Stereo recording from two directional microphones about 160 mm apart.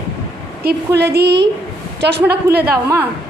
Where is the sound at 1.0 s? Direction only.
90° right.